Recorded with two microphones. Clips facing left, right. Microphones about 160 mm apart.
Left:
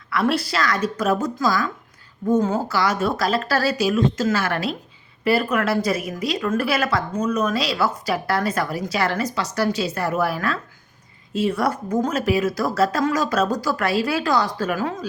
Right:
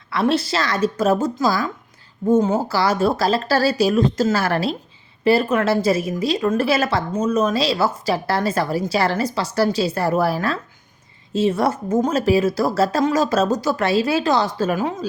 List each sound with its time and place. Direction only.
0.1 s a woman's voice: 25° right (ahead or behind)